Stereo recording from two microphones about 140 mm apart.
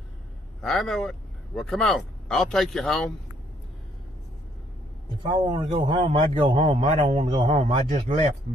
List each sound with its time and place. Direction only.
0.6 s speech: centre (ahead or behind)
5.2 s a man's voice: 35° right (ahead or behind)
7.4 s a man's voice: 35° right (ahead or behind)